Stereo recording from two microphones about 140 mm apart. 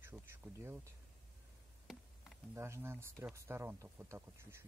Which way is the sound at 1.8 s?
Centre (ahead or behind).